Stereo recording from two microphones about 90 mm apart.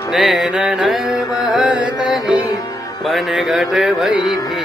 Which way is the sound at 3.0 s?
Centre (ahead or behind).